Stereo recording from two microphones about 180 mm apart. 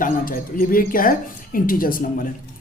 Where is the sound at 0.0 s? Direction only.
50° left (ahead or behind).